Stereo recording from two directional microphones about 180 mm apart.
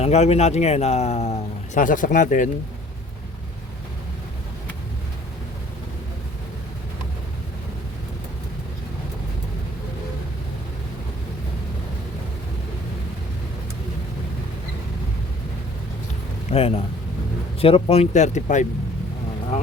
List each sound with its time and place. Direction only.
0.0 s speech: 35° left (ahead or behind)
16.5 s speech: 35° left (ahead or behind)